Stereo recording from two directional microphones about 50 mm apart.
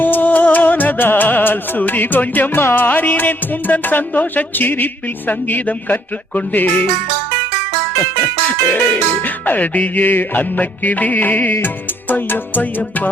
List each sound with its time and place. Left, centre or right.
0.0 s music: left
8.6 s music: left